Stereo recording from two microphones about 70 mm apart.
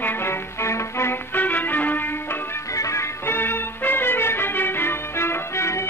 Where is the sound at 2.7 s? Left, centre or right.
Left.